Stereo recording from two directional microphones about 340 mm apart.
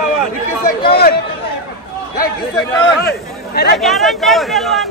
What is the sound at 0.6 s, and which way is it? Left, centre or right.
Speech, left.